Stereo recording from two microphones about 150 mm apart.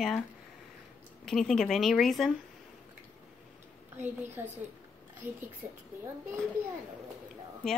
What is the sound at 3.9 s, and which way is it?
A woman's voice, 15° right (ahead or behind).